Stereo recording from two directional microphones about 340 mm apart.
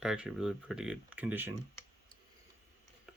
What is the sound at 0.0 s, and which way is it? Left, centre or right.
Speech, centre.